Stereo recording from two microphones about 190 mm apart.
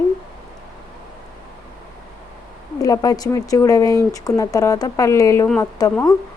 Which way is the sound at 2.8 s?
20° left (ahead or behind).